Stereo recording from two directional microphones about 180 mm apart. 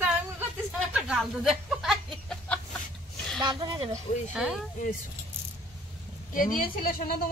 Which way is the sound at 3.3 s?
25° right (ahead or behind).